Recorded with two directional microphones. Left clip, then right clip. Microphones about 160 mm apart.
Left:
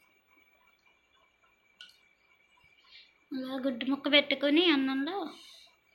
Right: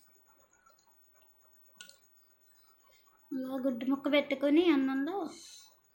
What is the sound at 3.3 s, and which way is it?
A woman's voice, 15° right (ahead or behind).